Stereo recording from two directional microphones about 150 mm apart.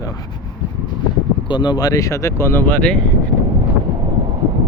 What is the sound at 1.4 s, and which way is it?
Speech, 30° left (ahead or behind).